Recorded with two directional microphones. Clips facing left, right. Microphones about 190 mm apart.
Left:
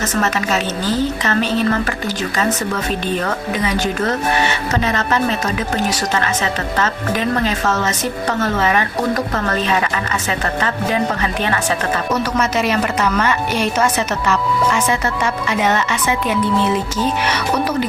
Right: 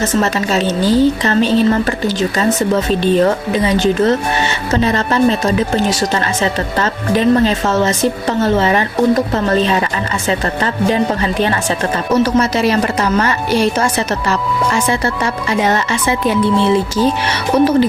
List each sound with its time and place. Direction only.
0.0 s a woman's voice: 30° right (ahead or behind)
11.2 s a woman's voice: 30° right (ahead or behind)